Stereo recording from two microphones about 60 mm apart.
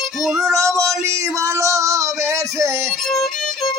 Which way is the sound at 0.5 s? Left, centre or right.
Right.